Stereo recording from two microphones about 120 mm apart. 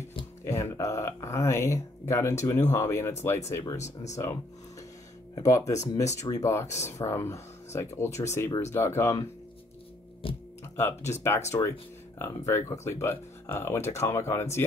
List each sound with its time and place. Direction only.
0.4 s speech: 25° left (ahead or behind)
3.8 s speech: 70° left (ahead or behind)
5.4 s speech: 25° left (ahead or behind)
10.6 s music: 20° left (ahead or behind)
11.1 s speech: 20° left (ahead or behind)